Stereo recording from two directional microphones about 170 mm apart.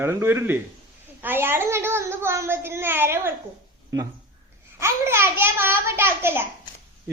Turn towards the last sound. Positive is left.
turn(degrees=-15)  # may be behind; listen again after turning